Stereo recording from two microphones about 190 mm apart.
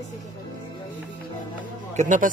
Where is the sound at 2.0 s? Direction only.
40° right (ahead or behind).